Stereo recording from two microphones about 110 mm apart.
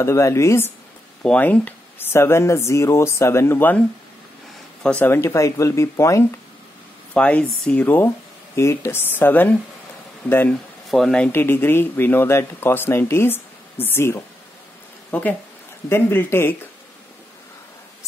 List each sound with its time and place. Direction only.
0.0 s speech: 25° left (ahead or behind)
1.2 s speech: 10° left (ahead or behind)
4.8 s speech: 15° left (ahead or behind)
7.2 s speech: 10° left (ahead or behind)
8.5 s speech: 25° left (ahead or behind)
10.9 s speech: 5° left (ahead or behind)
11.3 s speech: 20° left (ahead or behind)